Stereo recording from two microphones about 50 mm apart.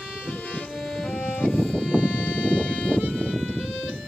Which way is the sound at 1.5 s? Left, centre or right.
Centre.